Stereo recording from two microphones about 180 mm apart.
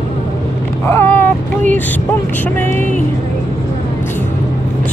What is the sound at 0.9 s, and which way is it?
Speech, 10° left (ahead or behind).